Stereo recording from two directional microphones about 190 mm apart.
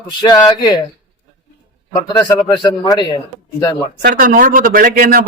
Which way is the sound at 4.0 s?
45° right (ahead or behind).